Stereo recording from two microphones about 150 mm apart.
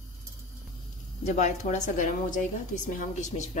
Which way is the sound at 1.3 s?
50° left (ahead or behind).